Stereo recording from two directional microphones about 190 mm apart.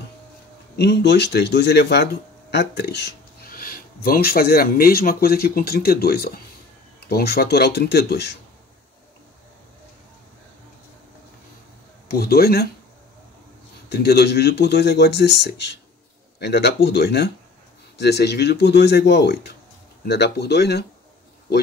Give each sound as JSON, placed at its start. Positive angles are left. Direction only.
{"t": 0.7, "sound": "speech", "side_deg": 60}
{"t": 12.1, "sound": "speech", "side_deg": 55}
{"t": 13.8, "sound": "speech", "side_deg": 60}